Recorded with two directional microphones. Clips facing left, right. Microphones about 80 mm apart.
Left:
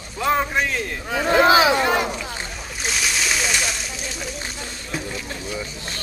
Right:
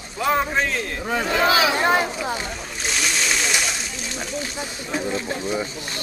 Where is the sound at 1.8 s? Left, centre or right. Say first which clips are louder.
Right 1 dB; right.